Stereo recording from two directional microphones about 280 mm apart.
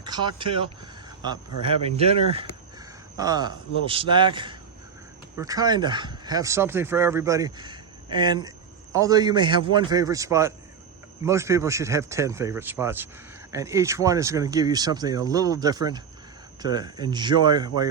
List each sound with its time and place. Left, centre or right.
0.0 s speech: centre
2.0 s a sound: right
3.8 s speech: centre